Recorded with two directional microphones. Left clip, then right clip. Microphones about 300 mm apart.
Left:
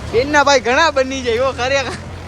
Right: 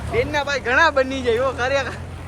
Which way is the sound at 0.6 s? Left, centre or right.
Centre.